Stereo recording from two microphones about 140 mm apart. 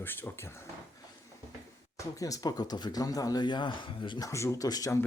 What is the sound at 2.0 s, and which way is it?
Speech, 25° left (ahead or behind).